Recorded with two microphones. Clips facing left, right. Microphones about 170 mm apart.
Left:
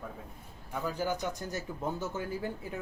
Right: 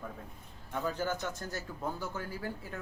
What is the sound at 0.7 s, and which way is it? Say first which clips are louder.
Speech: left 1 dB; 10° left (ahead or behind).